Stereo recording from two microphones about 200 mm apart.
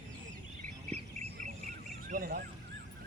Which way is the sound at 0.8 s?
30° right (ahead or behind).